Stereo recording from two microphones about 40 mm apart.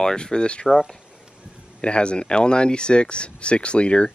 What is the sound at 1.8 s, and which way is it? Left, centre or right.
Speech, left.